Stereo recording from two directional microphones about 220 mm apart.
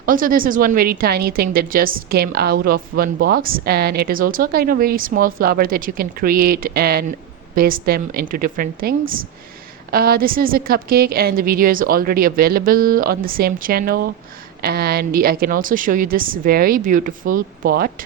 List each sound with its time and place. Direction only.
0.0 s a woman's voice: 40° right (ahead or behind)